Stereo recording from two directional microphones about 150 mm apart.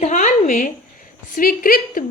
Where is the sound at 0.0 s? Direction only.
55° left (ahead or behind).